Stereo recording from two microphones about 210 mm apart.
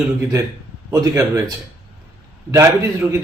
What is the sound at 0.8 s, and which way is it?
A man's voice, 15° right (ahead or behind).